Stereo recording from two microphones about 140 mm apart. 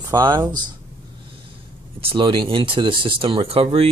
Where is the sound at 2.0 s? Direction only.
35° right (ahead or behind).